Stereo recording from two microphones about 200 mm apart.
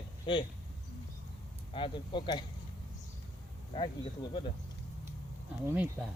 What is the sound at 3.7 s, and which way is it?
Speech, 20° left (ahead or behind).